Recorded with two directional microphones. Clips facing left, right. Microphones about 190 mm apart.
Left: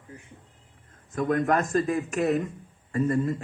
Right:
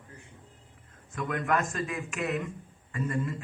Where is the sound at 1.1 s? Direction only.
35° left (ahead or behind).